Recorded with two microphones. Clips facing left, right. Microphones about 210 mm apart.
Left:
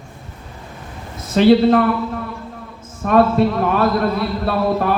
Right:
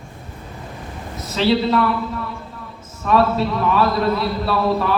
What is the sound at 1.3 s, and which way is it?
Speech, 50° left (ahead or behind).